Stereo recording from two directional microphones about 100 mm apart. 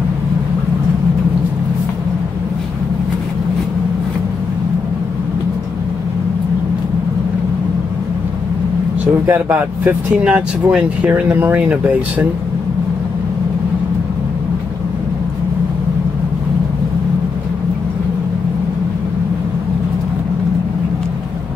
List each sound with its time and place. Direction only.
9.0 s speech: 20° right (ahead or behind)
10.2 s speech: 10° right (ahead or behind)